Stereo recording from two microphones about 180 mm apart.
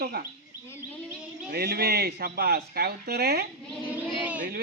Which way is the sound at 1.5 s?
60° right (ahead or behind).